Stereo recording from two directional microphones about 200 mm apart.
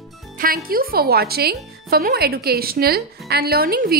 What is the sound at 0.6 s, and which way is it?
Speech, 45° right (ahead or behind).